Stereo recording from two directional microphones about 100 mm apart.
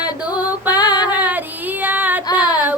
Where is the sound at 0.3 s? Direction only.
15° right (ahead or behind).